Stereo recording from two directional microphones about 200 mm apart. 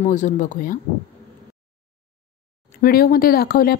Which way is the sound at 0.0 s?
35° left (ahead or behind).